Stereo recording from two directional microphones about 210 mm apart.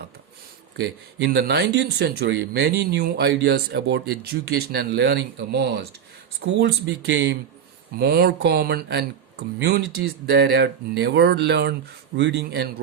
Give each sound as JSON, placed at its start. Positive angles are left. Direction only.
{"t": 0.8, "sound": "speech", "side_deg": -55}